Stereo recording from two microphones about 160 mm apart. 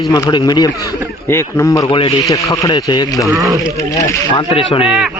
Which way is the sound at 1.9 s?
35° left (ahead or behind).